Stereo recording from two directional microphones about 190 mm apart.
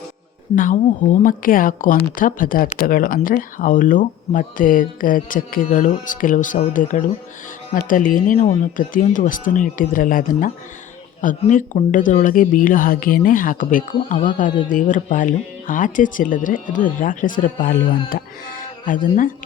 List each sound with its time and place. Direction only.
0.5 s speech: 45° left (ahead or behind)